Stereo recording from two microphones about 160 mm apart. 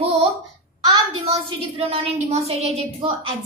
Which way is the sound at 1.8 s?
40° right (ahead or behind).